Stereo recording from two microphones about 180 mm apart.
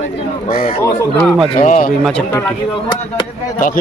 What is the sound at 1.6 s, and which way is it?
Speech, 45° left (ahead or behind).